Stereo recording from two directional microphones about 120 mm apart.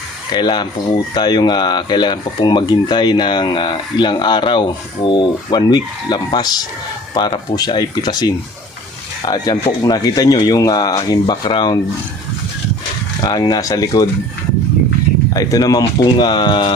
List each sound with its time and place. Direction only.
0.3 s speech: 40° left (ahead or behind)
13.2 s speech: 30° left (ahead or behind)
15.3 s speech: 30° left (ahead or behind)